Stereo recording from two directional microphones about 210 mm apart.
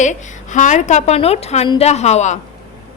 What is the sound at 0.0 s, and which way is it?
A woman's voice, 35° left (ahead or behind).